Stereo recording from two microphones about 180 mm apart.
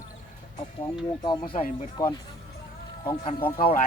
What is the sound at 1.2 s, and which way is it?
Speech, 25° left (ahead or behind).